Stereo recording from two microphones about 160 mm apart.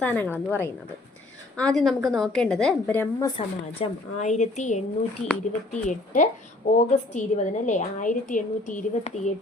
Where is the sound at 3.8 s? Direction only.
40° left (ahead or behind).